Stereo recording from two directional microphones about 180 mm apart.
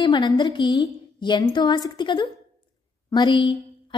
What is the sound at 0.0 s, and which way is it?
A woman's voice, 25° left (ahead or behind).